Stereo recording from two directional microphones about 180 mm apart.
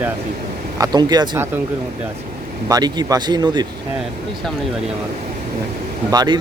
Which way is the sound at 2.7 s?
20° right (ahead or behind).